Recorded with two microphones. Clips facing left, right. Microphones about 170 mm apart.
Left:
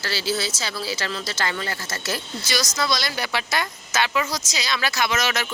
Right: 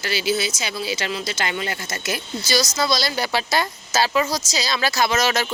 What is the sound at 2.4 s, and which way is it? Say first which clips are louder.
Speech: right 4 dB; 30° right (ahead or behind).